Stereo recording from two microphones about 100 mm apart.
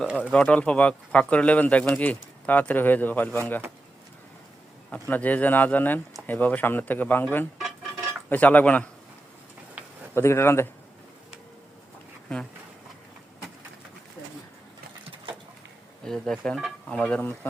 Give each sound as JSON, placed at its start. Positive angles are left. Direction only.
{"t": 0.2, "sound": "speech", "side_deg": 10}
{"t": 4.9, "sound": "speech", "side_deg": 15}
{"t": 10.2, "sound": "speech", "side_deg": 25}
{"t": 16.0, "sound": "speech", "side_deg": 5}